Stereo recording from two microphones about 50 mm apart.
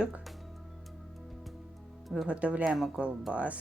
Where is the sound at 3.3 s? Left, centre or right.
Right.